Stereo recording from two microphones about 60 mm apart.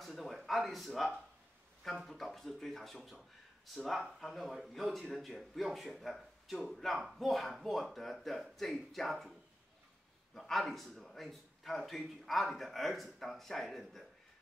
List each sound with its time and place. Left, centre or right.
0.0 s a sound: centre
2.0 s speech: centre
10.3 s speech: centre